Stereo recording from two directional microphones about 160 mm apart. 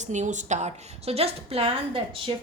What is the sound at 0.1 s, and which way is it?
A woman's voice, 50° right (ahead or behind).